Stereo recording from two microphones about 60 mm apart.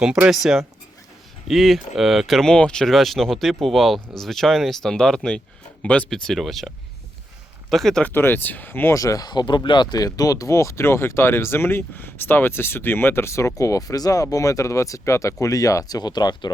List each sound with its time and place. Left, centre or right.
1.5 s speech: centre
5.8 s speech: left
6.1 s speech: centre
8.0 s speech: left
8.9 s speech: left